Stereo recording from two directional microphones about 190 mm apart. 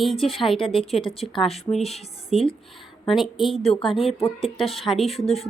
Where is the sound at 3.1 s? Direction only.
Centre (ahead or behind).